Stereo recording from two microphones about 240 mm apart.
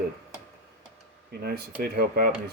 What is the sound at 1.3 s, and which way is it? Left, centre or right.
Speech, right.